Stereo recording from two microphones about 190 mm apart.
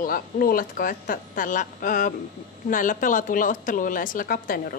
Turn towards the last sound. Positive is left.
turn(degrees=45)  # may be behind; listen again after turning